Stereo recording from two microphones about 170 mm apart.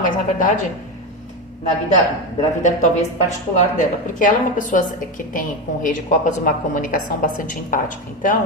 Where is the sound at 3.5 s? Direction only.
50° left (ahead or behind).